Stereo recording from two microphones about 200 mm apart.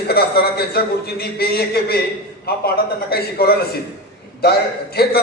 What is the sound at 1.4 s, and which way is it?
Speech, 50° left (ahead or behind).